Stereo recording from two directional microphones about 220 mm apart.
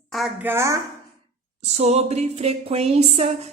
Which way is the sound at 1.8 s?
30° right (ahead or behind).